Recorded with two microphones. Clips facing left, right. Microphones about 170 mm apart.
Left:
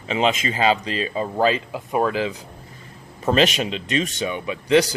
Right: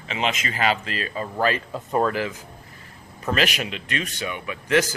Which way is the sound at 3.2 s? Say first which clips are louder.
Left 5 dB; 25° left (ahead or behind).